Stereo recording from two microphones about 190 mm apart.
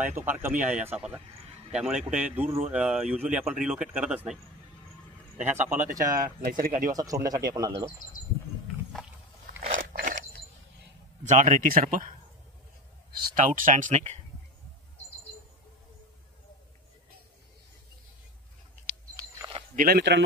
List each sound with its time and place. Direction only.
0.0 s speech: 10° right (ahead or behind)
2.4 s speech: 35° right (ahead or behind)
2.7 s speech: 5° right (ahead or behind)
5.4 s speech: 10° right (ahead or behind)
6.1 s speech: 50° right (ahead or behind)
6.9 s speech: 20° right (ahead or behind)
9.7 s biting: 45° right (ahead or behind)
11.2 s speech: 40° right (ahead or behind)
13.2 s speech: 45° right (ahead or behind)
19.1 s a sound: 15° right (ahead or behind)
19.7 s speech: 50° right (ahead or behind)